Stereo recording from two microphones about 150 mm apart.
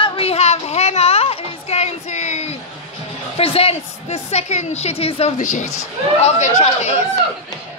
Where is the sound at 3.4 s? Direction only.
40° left (ahead or behind).